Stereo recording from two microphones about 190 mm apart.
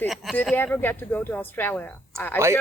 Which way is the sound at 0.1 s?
Centre (ahead or behind).